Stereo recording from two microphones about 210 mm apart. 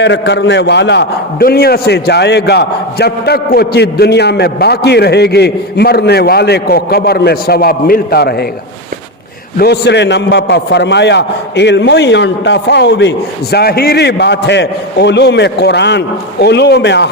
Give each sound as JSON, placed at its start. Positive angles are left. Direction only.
{"t": 0.0, "sound": "a man's voice", "side_deg": 55}
{"t": 9.6, "sound": "a man's voice", "side_deg": 50}